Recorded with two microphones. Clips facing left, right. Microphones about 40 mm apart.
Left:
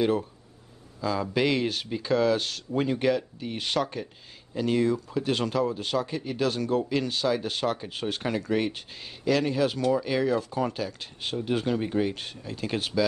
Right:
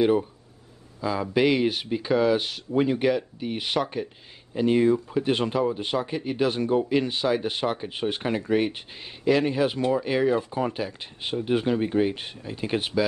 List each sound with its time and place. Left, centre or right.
0.0 s speech: centre